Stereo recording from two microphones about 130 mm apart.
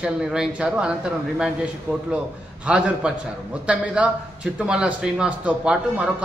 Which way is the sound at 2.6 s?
10° right (ahead or behind).